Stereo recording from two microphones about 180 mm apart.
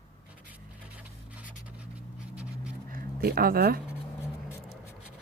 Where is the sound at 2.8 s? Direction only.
55° right (ahead or behind).